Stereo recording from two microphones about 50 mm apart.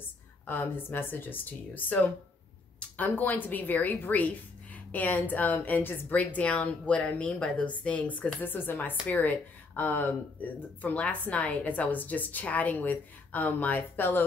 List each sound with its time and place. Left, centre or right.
0.5 s a woman's voice: left
8.5 s speech: left
9.0 s a woman's voice: left